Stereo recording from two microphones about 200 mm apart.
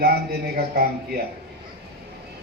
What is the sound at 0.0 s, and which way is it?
Speech, 50° right (ahead or behind).